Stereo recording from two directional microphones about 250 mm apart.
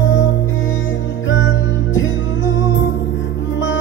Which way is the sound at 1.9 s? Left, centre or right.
Left.